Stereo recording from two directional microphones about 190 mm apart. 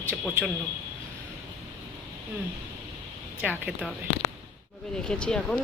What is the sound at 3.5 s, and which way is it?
Speech, 10° left (ahead or behind).